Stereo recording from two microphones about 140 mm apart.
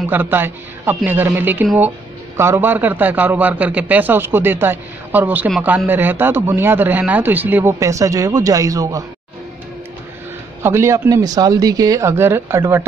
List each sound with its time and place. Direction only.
0.1 s a man's voice: 15° right (ahead or behind)
10.6 s speech: 20° right (ahead or behind)